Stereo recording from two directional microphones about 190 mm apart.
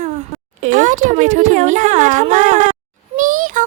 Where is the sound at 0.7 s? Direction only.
40° right (ahead or behind).